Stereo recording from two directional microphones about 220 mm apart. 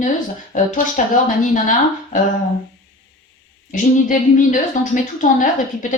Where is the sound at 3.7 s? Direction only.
35° left (ahead or behind).